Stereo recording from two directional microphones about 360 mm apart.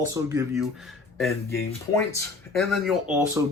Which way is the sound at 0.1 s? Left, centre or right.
Centre.